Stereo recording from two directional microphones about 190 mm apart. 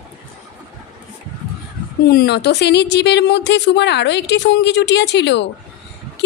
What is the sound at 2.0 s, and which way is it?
A woman's voice, 55° left (ahead or behind).